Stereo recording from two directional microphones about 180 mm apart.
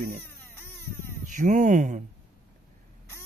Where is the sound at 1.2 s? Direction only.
45° right (ahead or behind).